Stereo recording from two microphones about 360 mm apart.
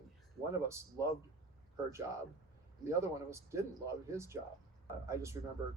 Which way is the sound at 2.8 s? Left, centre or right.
Centre.